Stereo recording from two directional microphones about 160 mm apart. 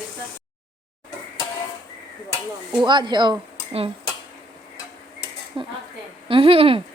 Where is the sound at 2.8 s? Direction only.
30° right (ahead or behind).